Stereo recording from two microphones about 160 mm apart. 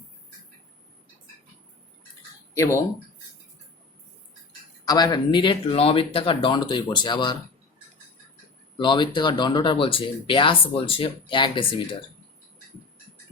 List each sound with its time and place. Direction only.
2.6 s speech: 15° left (ahead or behind)
4.9 s speech: 25° left (ahead or behind)
8.8 s speech: 30° left (ahead or behind)